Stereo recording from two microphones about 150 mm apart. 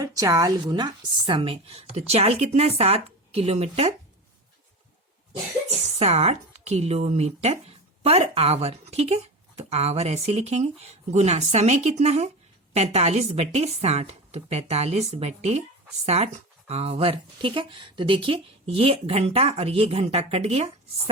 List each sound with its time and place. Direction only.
0.0 s speech: 25° right (ahead or behind); by 3.9 s 45° right (ahead or behind)
6.0 s speech: 45° right (ahead or behind)